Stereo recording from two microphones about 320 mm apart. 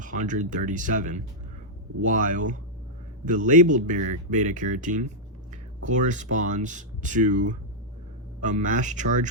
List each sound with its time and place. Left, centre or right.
0.0 s speech: right